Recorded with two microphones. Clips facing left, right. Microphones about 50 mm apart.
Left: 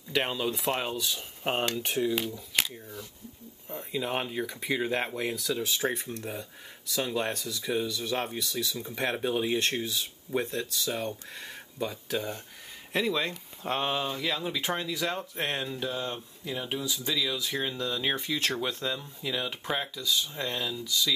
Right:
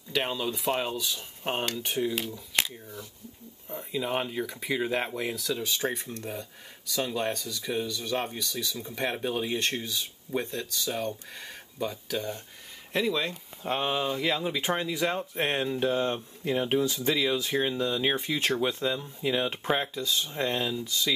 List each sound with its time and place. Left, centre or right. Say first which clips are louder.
0.1 s speech: left 1 dB; centre
2.0 s speech: left 1 dB; centre
14.1 s speech: right 3 dB; centre
15.8 s speech: right 6 dB; right
17.6 s speech: right 4 dB; centre
20.8 s speech: left 1 dB; right